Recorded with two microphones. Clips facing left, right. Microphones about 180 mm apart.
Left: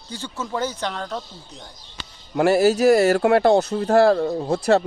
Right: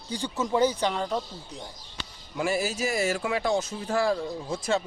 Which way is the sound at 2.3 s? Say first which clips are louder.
Left 11 dB; 70° left (ahead or behind).